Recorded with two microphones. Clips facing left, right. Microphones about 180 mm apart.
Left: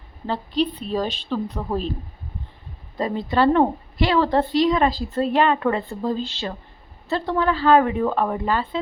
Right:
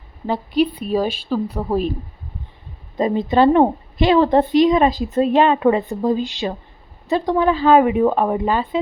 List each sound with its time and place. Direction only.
0.3 s speech: 10° right (ahead or behind)
3.0 s a woman's voice: 20° right (ahead or behind)